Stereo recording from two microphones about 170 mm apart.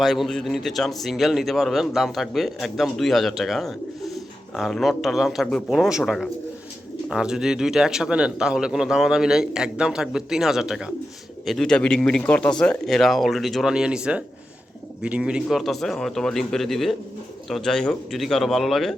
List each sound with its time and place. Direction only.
0.0 s speech: centre (ahead or behind)